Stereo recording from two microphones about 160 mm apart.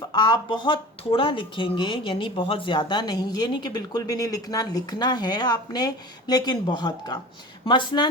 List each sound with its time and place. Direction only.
0.1 s speech: 25° left (ahead or behind)